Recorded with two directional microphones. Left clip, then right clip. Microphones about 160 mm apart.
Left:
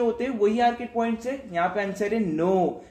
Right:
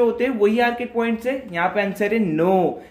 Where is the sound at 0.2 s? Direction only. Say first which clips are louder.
Right 4 dB; 15° right (ahead or behind).